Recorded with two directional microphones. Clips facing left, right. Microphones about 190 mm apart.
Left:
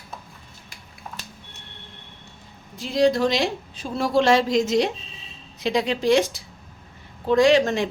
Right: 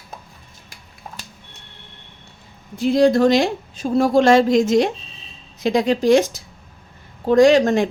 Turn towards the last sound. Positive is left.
turn(degrees=-45)  # may be behind; listen again after turning